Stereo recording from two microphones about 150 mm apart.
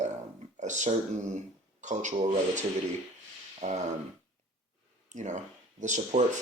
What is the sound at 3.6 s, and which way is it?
Speech, 50° right (ahead or behind).